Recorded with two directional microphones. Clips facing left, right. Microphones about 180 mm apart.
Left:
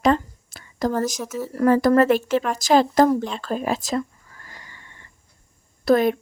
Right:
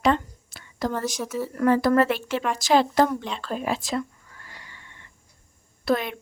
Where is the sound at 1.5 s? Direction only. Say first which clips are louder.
Left 3 dB; 40° left (ahead or behind).